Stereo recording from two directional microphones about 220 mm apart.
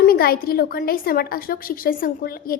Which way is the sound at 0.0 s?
40° left (ahead or behind).